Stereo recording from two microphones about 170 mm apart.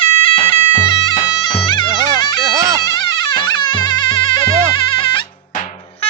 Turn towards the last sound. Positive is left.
turn(degrees=30)  # may be behind; listen again after turning